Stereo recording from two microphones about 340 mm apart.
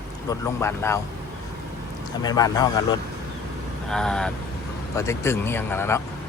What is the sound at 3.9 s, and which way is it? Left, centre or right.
Speech, centre.